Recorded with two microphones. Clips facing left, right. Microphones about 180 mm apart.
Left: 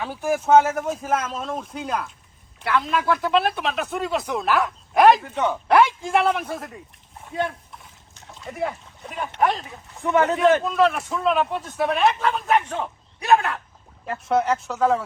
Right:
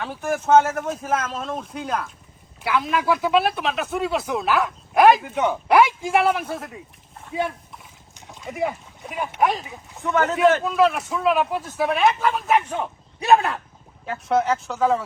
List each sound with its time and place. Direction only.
0.0 s speech: 5° left (ahead or behind)
13.1 s speech: 30° right (ahead or behind)
14.0 s speech: centre (ahead or behind)